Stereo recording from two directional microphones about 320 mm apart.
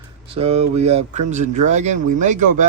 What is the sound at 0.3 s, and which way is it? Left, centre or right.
Speech, centre.